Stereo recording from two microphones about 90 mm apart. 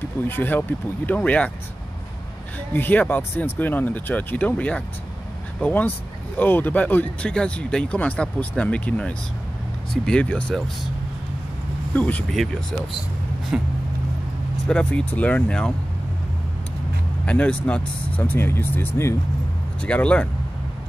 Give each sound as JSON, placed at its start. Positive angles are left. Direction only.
{"t": 0.0, "sound": "speech", "side_deg": 25}
{"t": 2.7, "sound": "speech", "side_deg": 20}
{"t": 11.9, "sound": "speech", "side_deg": 15}
{"t": 12.3, "sound": "speech", "side_deg": 5}
{"t": 13.5, "sound": "vehicle", "side_deg": -10}
{"t": 14.7, "sound": "speech", "side_deg": 10}
{"t": 17.3, "sound": "speech", "side_deg": 15}
{"t": 19.8, "sound": "speech", "side_deg": 15}